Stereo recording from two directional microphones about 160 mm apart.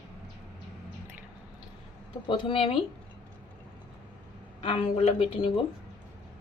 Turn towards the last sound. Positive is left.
turn(degrees=40)  # may be behind; listen again after turning